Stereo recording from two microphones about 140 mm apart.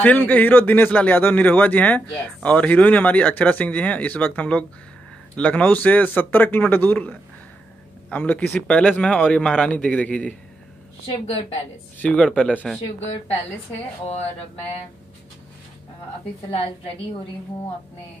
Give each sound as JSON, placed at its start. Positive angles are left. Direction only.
{"t": 0.0, "sound": "a man's voice", "side_deg": 10}
{"t": 12.0, "sound": "a man's voice", "side_deg": 10}
{"t": 16.4, "sound": "a woman's voice", "side_deg": 45}